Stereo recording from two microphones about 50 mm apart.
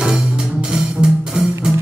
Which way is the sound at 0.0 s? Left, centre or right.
Centre.